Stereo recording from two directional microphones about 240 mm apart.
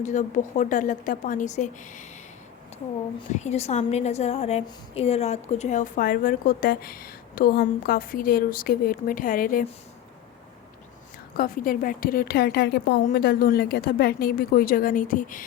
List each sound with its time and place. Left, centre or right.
0.0 s a woman's voice: left
3.2 s a woman's voice: left
11.3 s a woman's voice: left